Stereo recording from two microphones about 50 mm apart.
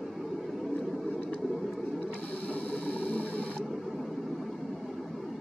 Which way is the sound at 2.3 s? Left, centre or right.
Left.